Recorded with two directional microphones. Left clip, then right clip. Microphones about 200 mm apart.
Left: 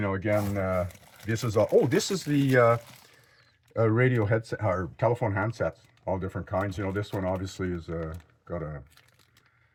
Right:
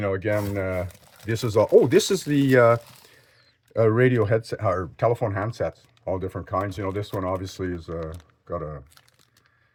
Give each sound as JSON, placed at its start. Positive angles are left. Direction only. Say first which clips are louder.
{"t": 0.0, "sound": "speech", "louder": "right 3 dB", "side_deg": -50}
{"t": 8.0, "sound": "speech", "louder": "right 3 dB", "side_deg": -30}